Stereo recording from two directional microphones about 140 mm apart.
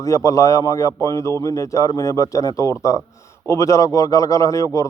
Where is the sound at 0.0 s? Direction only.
25° left (ahead or behind).